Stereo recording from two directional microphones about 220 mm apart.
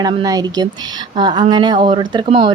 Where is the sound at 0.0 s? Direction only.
15° right (ahead or behind).